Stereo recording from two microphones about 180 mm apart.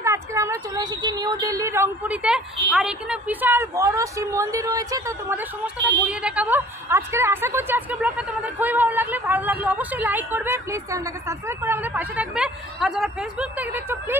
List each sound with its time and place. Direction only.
0.0 s a woman's voice: 15° right (ahead or behind)